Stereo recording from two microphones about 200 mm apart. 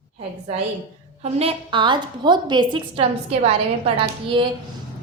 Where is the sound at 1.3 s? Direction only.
25° right (ahead or behind).